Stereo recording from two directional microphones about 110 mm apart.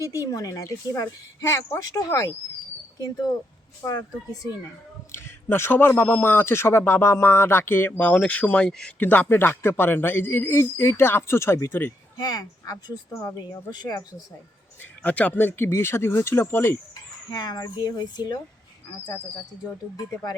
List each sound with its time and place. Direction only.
0.0 s a man's voice: 30° left (ahead or behind)
3.8 s speech: 35° left (ahead or behind)
5.1 s a man's voice: 25° left (ahead or behind)
12.1 s speech: 35° left (ahead or behind)
13.1 s a man's voice: 20° left (ahead or behind)
13.7 s speech: 35° left (ahead or behind)
15.0 s a man's voice: 15° left (ahead or behind)
17.3 s speech: 35° left (ahead or behind)